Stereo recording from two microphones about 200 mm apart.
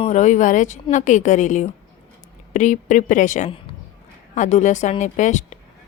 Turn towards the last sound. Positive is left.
turn(degrees=35)  # may be behind; listen again after turning